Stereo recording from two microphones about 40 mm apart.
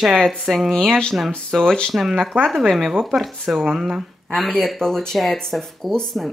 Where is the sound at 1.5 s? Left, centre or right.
Centre.